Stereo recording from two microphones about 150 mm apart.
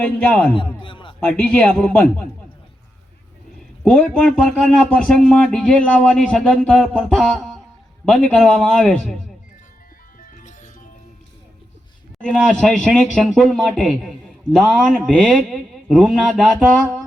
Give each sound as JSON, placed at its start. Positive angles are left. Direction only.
{"t": 0.0, "sound": "a man's voice", "side_deg": 10}
{"t": 0.5, "sound": "a man's voice", "side_deg": 35}
{"t": 1.2, "sound": "a man's voice", "side_deg": 10}
{"t": 3.8, "sound": "speech", "side_deg": 5}
{"t": 10.2, "sound": "music", "side_deg": 60}
{"t": 12.2, "sound": "speech", "side_deg": 5}